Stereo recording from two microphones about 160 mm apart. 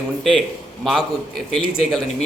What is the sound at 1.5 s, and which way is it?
Speech, centre (ahead or behind).